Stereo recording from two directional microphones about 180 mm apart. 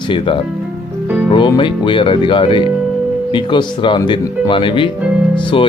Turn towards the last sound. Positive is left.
turn(degrees=30)  # may be behind; listen again after turning